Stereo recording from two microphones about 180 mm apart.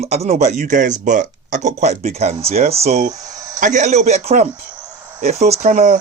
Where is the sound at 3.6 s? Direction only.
40° right (ahead or behind).